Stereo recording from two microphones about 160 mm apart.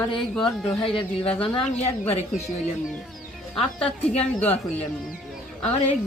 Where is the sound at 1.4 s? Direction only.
35° left (ahead or behind).